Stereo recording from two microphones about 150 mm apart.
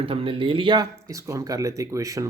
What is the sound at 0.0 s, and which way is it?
A man's voice, 40° right (ahead or behind).